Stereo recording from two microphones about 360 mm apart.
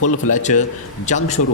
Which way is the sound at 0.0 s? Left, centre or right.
Left.